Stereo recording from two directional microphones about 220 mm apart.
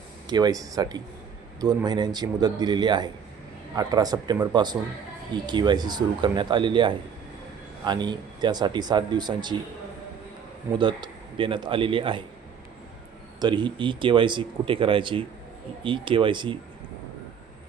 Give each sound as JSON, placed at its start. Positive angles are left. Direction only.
{"t": 0.3, "sound": "speech", "side_deg": -20}
{"t": 10.8, "sound": "speech", "side_deg": -20}
{"t": 13.4, "sound": "speech", "side_deg": -20}